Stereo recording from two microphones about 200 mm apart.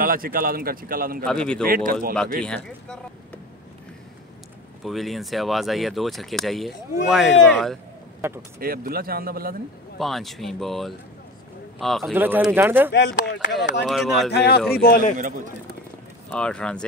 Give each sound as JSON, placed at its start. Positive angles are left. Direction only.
{"t": 0.0, "sound": "a man's voice", "side_deg": -45}
{"t": 1.2, "sound": "speech", "side_deg": 5}
{"t": 1.7, "sound": "a man's voice", "side_deg": -45}
{"t": 2.4, "sound": "speech", "side_deg": 5}
{"t": 4.8, "sound": "speech", "side_deg": 0}
{"t": 8.2, "sound": "speech", "side_deg": -10}
{"t": 8.5, "sound": "a man's voice", "side_deg": -45}
{"t": 9.9, "sound": "speech", "side_deg": 0}
{"t": 12.1, "sound": "speech", "side_deg": -10}
{"t": 12.9, "sound": "speech", "side_deg": 60}
{"t": 13.8, "sound": "speech", "side_deg": 0}
{"t": 14.3, "sound": "a man's voice", "side_deg": 55}
{"t": 15.1, "sound": "a man's voice", "side_deg": -40}
{"t": 16.3, "sound": "speech", "side_deg": 5}